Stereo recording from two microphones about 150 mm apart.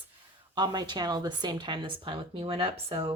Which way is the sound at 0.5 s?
30° right (ahead or behind).